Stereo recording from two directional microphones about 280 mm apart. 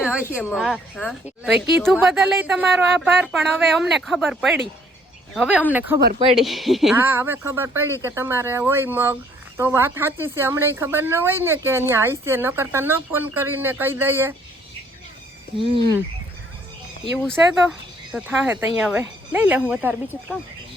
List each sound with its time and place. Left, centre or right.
0.4 s a woman's voice: centre
15.5 s speech: centre
17.2 s a woman's voice: centre